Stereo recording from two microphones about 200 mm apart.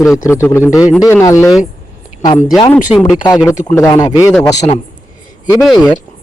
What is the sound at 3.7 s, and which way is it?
Speech, 15° left (ahead or behind).